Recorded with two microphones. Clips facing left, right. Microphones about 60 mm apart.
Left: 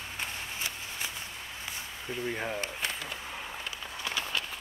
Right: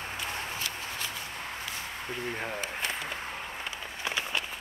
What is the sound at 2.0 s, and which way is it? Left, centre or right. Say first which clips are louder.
Speech: left 2 dB; right.